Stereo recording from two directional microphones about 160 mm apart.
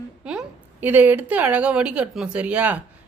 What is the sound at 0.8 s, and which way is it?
Speech, 10° right (ahead or behind).